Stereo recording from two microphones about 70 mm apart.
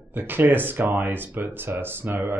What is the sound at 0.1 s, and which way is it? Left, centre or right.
Speech, right.